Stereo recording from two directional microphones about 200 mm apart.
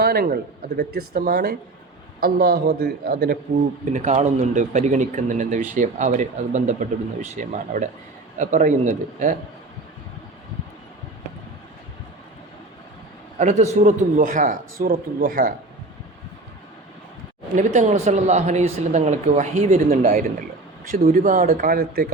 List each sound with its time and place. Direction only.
0.0 s a man's voice: 50° right (ahead or behind)
3.9 s speech: 35° right (ahead or behind)
13.4 s a man's voice: 35° right (ahead or behind)
17.5 s a man's voice: 35° right (ahead or behind)